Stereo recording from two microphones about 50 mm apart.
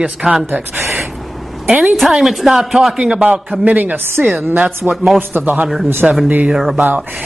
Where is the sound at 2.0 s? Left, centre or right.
Centre.